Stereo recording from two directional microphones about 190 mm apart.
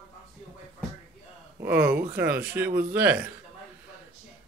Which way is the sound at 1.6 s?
10° right (ahead or behind).